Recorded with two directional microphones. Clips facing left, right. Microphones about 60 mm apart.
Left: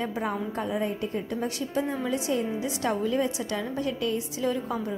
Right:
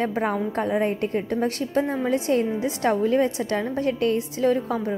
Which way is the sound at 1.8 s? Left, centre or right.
Right.